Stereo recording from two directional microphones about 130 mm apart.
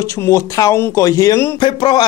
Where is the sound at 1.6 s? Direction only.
35° left (ahead or behind).